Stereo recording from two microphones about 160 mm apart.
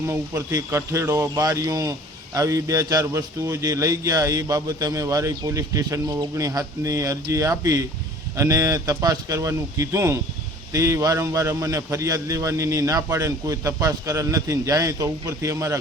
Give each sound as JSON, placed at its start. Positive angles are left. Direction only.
{"t": 0.0, "sound": "a man's voice", "side_deg": -15}